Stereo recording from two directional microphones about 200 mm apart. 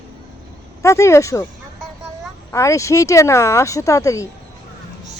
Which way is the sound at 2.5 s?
15° left (ahead or behind).